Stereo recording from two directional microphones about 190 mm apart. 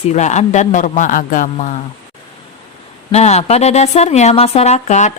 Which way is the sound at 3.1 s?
35° left (ahead or behind).